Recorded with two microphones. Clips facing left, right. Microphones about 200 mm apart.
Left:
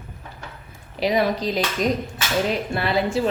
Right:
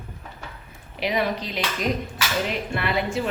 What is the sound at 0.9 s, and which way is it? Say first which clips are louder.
Speech: left 4 dB; 35° left (ahead or behind).